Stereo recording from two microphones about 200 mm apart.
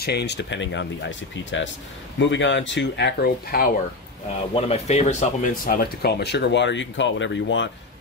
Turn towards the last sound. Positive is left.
turn(degrees=65)  # may be behind; listen again after turning